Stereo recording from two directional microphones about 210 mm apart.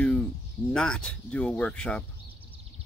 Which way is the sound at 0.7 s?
5° left (ahead or behind).